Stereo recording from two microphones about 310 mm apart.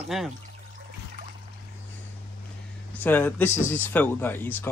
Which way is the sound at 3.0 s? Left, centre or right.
Centre.